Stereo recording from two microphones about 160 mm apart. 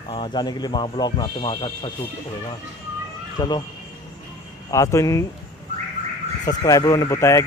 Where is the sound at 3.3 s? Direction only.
25° left (ahead or behind).